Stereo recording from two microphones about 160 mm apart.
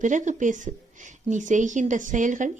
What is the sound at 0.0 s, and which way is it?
Speech, 50° right (ahead or behind).